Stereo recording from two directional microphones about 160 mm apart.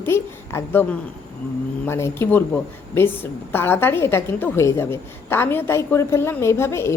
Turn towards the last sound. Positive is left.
turn(degrees=15)  # may be behind; listen again after turning